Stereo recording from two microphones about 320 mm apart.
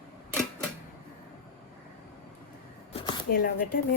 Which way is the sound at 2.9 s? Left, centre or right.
Centre.